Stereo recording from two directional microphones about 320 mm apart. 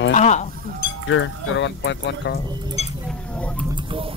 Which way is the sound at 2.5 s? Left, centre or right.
Centre.